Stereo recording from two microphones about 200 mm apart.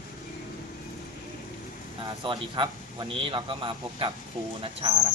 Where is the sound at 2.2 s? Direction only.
25° right (ahead or behind).